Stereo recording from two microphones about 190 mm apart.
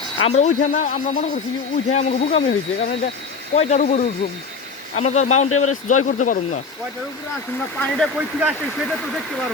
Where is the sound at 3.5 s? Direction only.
40° left (ahead or behind).